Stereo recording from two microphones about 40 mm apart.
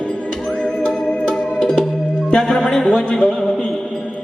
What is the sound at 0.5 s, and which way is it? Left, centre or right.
Music, left.